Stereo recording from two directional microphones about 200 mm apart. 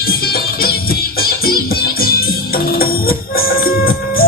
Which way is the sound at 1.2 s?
50° left (ahead or behind).